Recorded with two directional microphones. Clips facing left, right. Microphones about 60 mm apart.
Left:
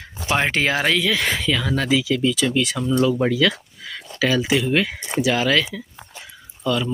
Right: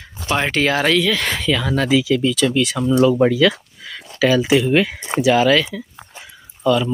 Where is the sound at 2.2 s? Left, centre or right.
Centre.